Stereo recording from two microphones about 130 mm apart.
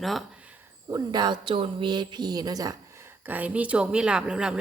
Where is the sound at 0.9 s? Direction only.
30° right (ahead or behind); by 4.5 s 5° right (ahead or behind).